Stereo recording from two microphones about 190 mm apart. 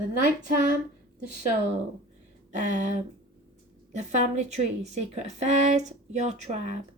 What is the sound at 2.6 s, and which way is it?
Speech, 40° right (ahead or behind).